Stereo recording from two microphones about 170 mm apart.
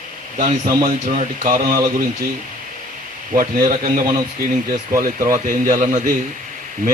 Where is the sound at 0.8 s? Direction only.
55° right (ahead or behind).